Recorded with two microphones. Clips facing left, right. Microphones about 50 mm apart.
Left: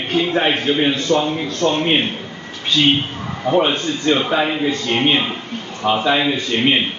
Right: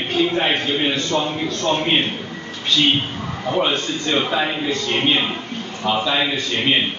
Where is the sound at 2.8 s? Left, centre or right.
Centre.